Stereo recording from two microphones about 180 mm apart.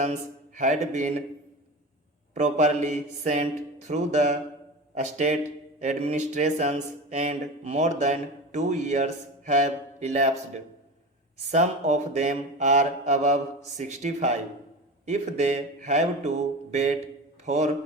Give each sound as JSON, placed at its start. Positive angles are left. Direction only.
{"t": 0.0, "sound": "speech", "side_deg": -40}
{"t": 2.3, "sound": "mantra", "side_deg": -40}
{"t": 11.5, "sound": "mantra", "side_deg": -40}
{"t": 17.4, "sound": "speech", "side_deg": -40}